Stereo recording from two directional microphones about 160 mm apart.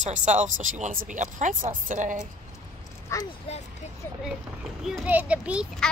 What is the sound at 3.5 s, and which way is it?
Speech, 40° left (ahead or behind).